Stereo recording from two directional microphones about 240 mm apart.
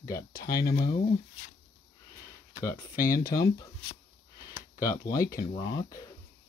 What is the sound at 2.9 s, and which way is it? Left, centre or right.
Speech, left.